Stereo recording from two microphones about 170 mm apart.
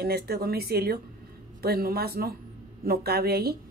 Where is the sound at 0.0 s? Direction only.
65° right (ahead or behind).